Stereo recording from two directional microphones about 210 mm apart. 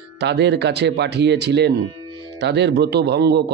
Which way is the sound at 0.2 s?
55° right (ahead or behind).